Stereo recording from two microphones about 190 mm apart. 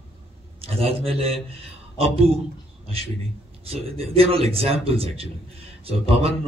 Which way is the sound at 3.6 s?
30° right (ahead or behind).